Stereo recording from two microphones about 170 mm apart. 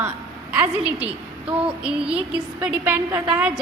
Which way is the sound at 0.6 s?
10° right (ahead or behind).